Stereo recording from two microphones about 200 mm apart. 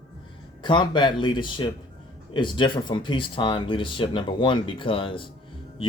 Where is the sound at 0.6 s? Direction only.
25° left (ahead or behind).